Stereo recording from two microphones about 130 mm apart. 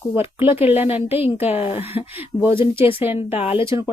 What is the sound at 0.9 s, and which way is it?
Speech, 50° left (ahead or behind).